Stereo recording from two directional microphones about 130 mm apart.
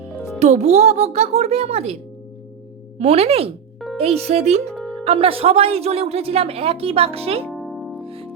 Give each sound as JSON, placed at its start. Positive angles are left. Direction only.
{"t": 0.3, "sound": "speech", "side_deg": -60}
{"t": 3.0, "sound": "a woman's voice", "side_deg": -50}
{"t": 4.7, "sound": "music", "side_deg": 5}
{"t": 5.0, "sound": "a woman's voice", "side_deg": -45}
{"t": 7.5, "sound": "music", "side_deg": 0}
{"t": 8.0, "sound": "music", "side_deg": -45}